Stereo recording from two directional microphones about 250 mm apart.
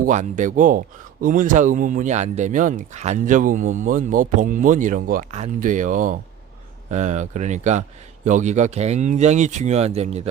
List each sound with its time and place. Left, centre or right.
0.0 s a man's voice: right